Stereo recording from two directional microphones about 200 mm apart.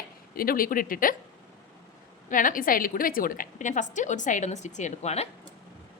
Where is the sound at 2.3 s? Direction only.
40° left (ahead or behind).